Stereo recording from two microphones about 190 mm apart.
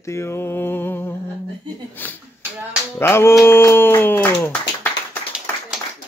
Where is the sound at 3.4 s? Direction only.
10° left (ahead or behind).